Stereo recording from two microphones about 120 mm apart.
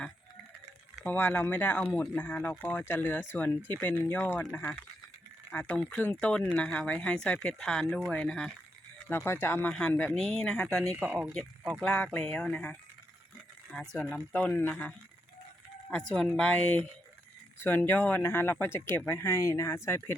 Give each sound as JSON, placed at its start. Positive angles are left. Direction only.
{"t": 1.0, "sound": "speech", "side_deg": 10}
{"t": 9.0, "sound": "speech", "side_deg": 20}
{"t": 10.2, "sound": "speech", "side_deg": 5}
{"t": 11.0, "sound": "speech", "side_deg": -10}
{"t": 11.3, "sound": "speech", "side_deg": 5}
{"t": 13.9, "sound": "speech", "side_deg": 5}